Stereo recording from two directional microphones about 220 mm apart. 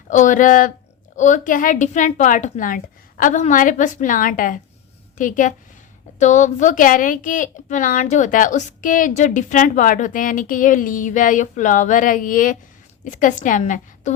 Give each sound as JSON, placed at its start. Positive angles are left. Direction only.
{"t": 0.1, "sound": "speech", "side_deg": 35}